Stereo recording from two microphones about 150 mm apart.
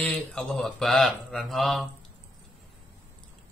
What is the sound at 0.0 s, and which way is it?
Mantra, 5° left (ahead or behind).